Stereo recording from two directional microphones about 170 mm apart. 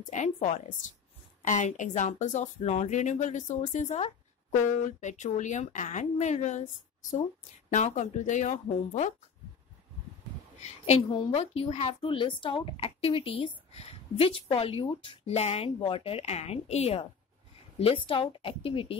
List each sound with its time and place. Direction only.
0.1 s speech: 45° left (ahead or behind)
10.6 s a woman's voice: 35° left (ahead or behind)